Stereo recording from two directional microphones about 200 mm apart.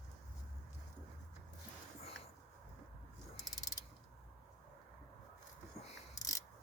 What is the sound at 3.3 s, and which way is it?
Mechanisms, 20° left (ahead or behind).